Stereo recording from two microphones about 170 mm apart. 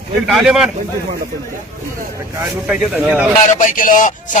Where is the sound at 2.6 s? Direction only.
5° right (ahead or behind).